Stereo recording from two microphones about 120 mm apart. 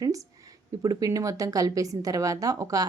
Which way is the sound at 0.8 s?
30° right (ahead or behind).